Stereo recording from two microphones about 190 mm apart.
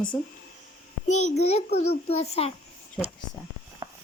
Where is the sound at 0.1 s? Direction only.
10° left (ahead or behind).